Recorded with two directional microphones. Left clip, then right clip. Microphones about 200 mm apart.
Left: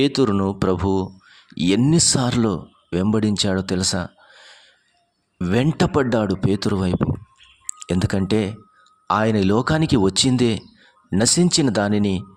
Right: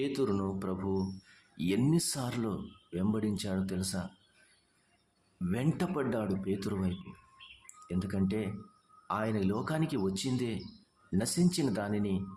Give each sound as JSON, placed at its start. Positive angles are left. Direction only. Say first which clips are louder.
{"t": 0.0, "sound": "speech", "louder": "left 13 dB", "side_deg": 50}
{"t": 5.5, "sound": "speech", "louder": "left 15 dB", "side_deg": 50}